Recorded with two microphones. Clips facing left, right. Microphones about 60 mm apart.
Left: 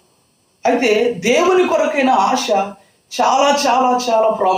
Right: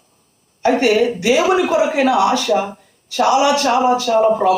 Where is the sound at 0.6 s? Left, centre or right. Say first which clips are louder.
Even; centre.